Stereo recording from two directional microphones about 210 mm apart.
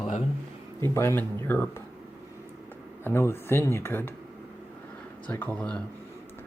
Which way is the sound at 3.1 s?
10° left (ahead or behind).